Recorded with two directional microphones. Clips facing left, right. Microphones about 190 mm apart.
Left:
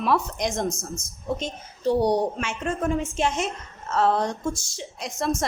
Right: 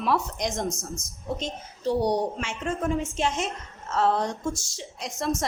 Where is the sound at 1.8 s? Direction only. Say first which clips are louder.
Left 3 dB; 55° left (ahead or behind).